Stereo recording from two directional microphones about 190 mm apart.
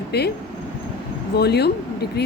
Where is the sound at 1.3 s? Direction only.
60° left (ahead or behind).